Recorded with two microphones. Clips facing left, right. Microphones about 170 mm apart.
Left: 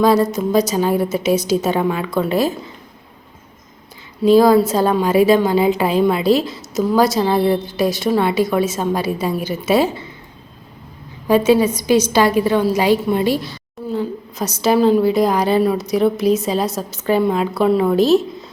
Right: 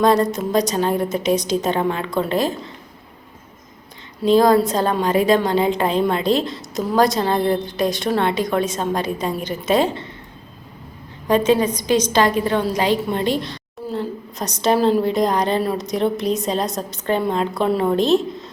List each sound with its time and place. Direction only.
0.0 s a woman's voice: 5° left (ahead or behind)
4.2 s a woman's voice: 5° left (ahead or behind)
11.3 s a woman's voice: 10° left (ahead or behind)